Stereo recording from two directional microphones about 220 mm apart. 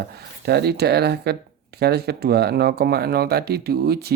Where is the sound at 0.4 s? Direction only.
50° right (ahead or behind).